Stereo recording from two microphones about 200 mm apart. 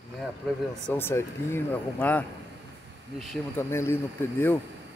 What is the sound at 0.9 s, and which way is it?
Speech, 10° left (ahead or behind).